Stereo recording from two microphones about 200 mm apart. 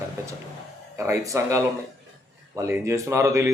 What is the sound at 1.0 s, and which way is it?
Speech, 15° right (ahead or behind).